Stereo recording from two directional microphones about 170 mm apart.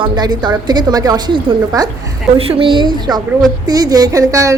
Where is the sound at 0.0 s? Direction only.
25° right (ahead or behind).